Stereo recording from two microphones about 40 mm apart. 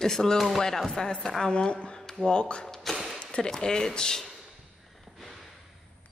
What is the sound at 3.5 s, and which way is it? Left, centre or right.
Speech, centre.